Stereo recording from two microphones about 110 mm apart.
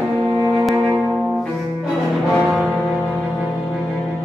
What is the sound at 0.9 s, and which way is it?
Music, 5° right (ahead or behind).